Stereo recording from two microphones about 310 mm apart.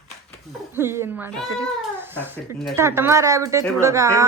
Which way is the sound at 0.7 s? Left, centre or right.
Centre.